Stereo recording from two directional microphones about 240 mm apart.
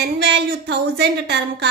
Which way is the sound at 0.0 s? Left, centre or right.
Right.